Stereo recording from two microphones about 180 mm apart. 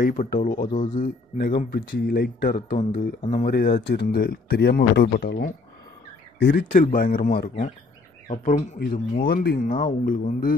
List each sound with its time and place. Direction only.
0.0 s speech: 45° left (ahead or behind)
1.7 s speech: 55° left (ahead or behind)
3.2 s speech: 35° left (ahead or behind)
3.4 s speech: 55° left (ahead or behind)
6.4 s speech: 55° left (ahead or behind)
8.3 s speech: 40° left (ahead or behind)
8.7 s speech: 60° left (ahead or behind)